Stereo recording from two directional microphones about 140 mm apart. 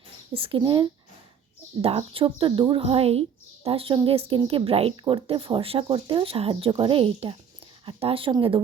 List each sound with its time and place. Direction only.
0.3 s speech: 40° right (ahead or behind)